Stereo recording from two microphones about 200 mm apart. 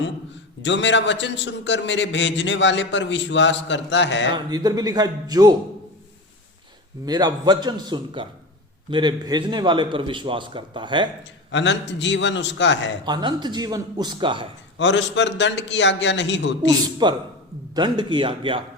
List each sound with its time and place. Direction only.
0.6 s a man's voice: 65° left (ahead or behind)
4.4 s a man's voice: 20° right (ahead or behind)
7.0 s a man's voice: 20° right (ahead or behind)
11.5 s a man's voice: 65° left (ahead or behind)
13.1 s a man's voice: 20° right (ahead or behind)
14.8 s a man's voice: 65° left (ahead or behind)
17.0 s a man's voice: 20° right (ahead or behind)